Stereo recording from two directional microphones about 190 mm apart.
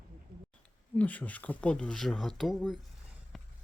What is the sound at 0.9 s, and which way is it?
Speech, 10° left (ahead or behind).